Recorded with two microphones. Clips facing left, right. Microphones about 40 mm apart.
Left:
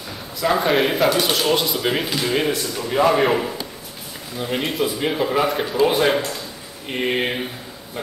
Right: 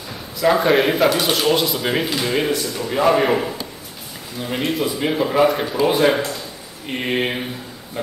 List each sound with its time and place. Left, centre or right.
0.4 s speech: centre